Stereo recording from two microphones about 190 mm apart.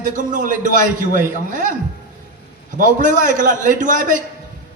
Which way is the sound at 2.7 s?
45° right (ahead or behind).